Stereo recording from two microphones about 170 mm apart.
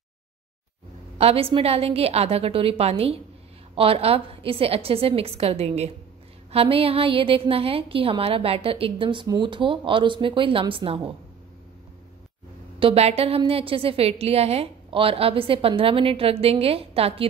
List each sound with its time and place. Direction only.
1.1 s a woman's voice: 35° right (ahead or behind)
12.7 s a woman's voice: 35° right (ahead or behind)